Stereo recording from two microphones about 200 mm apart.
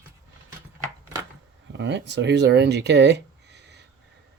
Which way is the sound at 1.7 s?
60° right (ahead or behind).